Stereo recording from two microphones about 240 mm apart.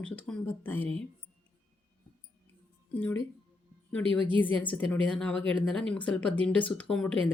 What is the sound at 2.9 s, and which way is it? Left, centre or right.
Speech, centre.